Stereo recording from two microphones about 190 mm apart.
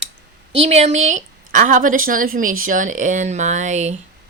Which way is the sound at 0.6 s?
35° right (ahead or behind).